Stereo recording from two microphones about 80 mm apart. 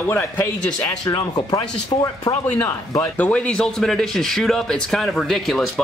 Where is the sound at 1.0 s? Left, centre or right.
Left.